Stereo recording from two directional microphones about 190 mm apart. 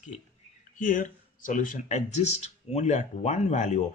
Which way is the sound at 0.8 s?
45° left (ahead or behind).